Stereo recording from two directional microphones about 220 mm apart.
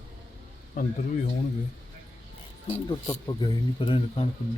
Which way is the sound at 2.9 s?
20° left (ahead or behind).